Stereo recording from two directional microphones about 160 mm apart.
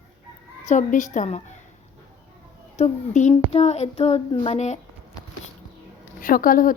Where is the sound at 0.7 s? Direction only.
50° left (ahead or behind).